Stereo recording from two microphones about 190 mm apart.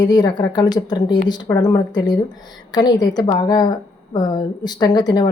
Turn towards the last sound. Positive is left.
turn(degrees=20)  # may be behind; listen again after turning